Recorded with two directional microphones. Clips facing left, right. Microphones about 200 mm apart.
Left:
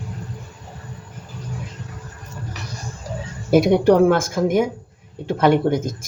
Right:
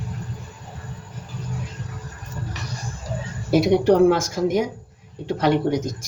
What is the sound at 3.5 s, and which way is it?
A woman's voice, 55° left (ahead or behind).